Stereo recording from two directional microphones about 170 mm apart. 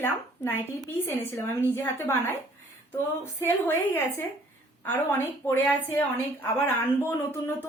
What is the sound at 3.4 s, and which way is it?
A woman's voice, 15° left (ahead or behind).